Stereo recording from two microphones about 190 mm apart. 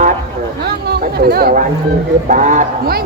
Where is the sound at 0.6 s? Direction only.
55° right (ahead or behind).